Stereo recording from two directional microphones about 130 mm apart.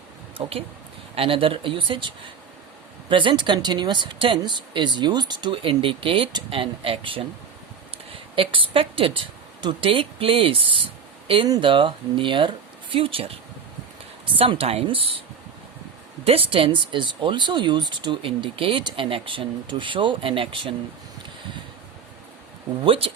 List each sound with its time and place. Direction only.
0.4 s a woman's voice: 40° right (ahead or behind)
16.2 s speech: 45° right (ahead or behind)
22.8 s speech: 45° right (ahead or behind)